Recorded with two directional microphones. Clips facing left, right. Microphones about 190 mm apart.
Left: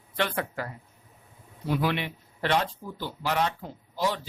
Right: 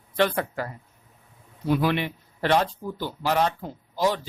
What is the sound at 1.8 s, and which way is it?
Speech, 45° right (ahead or behind).